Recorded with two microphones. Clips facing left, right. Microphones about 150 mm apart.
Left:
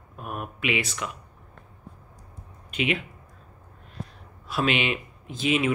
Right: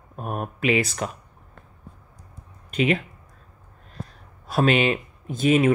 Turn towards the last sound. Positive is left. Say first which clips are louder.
# right 6 dB
turn(degrees=-45)  # may be behind; listen again after turning